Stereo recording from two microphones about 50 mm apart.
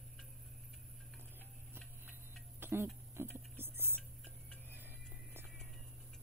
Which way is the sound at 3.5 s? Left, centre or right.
Right.